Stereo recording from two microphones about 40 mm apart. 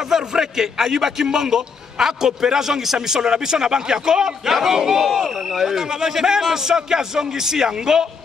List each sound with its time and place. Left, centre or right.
0.1 s a man's voice: centre